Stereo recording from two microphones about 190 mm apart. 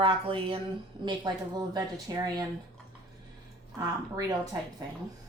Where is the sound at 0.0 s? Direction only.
30° right (ahead or behind).